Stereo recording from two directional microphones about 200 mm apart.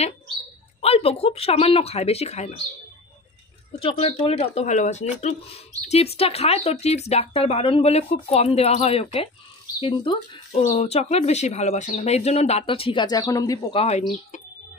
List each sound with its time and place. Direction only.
0.7 s speech: 30° left (ahead or behind)
3.8 s speech: 30° left (ahead or behind)